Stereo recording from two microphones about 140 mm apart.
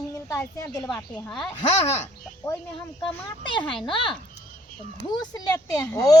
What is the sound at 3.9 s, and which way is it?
Speech, 35° left (ahead or behind).